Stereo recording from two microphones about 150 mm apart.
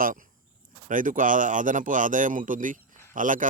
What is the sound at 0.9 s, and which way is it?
Speech, 60° right (ahead or behind).